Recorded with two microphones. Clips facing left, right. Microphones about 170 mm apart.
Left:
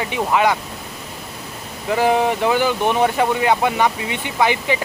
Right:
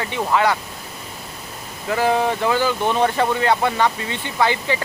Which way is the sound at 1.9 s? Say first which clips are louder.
Left 2 dB; 15° left (ahead or behind).